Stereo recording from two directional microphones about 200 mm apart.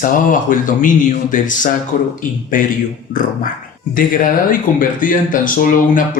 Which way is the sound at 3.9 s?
45° left (ahead or behind).